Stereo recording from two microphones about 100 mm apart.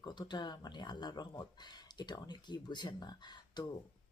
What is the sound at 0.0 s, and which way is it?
Speech, 50° left (ahead or behind).